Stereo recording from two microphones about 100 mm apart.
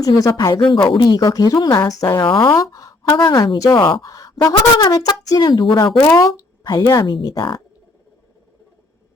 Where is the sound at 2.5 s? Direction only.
35° left (ahead or behind).